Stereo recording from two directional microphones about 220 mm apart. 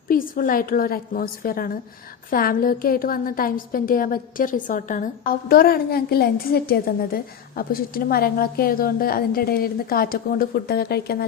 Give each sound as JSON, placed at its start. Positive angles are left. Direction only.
{"t": 0.1, "sound": "a woman's voice", "side_deg": 40}